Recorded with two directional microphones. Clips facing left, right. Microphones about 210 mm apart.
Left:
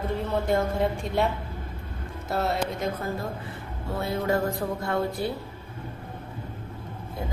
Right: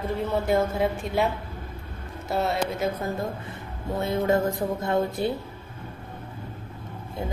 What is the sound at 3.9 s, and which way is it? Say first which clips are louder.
Music: right 3 dB; 20° right (ahead or behind).